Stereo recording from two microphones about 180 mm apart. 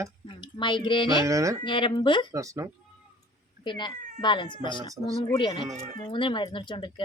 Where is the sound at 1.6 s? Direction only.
25° left (ahead or behind).